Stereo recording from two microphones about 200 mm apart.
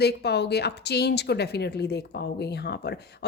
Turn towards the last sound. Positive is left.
turn(degrees=55)  # may be behind; listen again after turning